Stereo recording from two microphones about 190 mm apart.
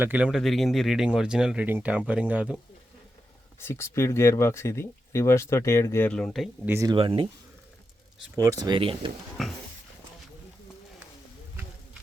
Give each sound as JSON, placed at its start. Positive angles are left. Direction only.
{"t": 0.0, "sound": "speech", "side_deg": -10}
{"t": 3.6, "sound": "speech", "side_deg": 15}
{"t": 6.7, "sound": "speech", "side_deg": -15}
{"t": 6.9, "sound": "speech", "side_deg": -30}
{"t": 8.4, "sound": "speech", "side_deg": -20}
{"t": 9.4, "sound": "speech", "side_deg": 0}